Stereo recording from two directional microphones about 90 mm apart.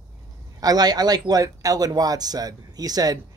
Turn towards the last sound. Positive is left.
turn(degrees=-45)  # may be behind; listen again after turning